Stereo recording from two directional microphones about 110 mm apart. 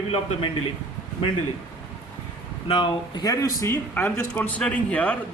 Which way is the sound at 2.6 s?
55° left (ahead or behind).